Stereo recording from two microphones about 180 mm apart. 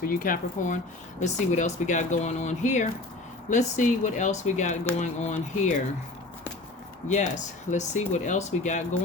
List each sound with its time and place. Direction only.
0.0 s speech: 50° left (ahead or behind)
7.1 s speech: 40° left (ahead or behind)